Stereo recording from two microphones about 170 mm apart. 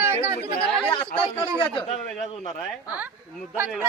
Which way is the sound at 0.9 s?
30° left (ahead or behind).